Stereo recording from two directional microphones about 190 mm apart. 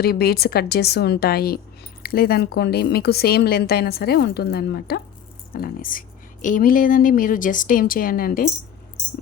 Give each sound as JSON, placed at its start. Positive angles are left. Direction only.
{"t": 0.0, "sound": "a woman's voice", "side_deg": 55}